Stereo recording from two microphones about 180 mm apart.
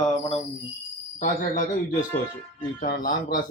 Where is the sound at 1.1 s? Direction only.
45° left (ahead or behind).